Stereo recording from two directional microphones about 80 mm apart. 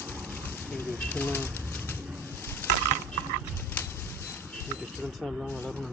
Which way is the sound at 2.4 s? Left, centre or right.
Left.